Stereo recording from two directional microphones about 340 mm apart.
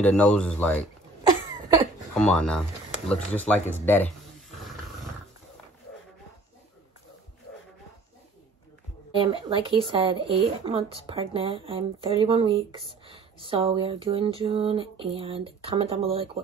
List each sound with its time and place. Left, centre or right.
0.0 s speech: centre
2.1 s speech: centre
9.2 s speech: centre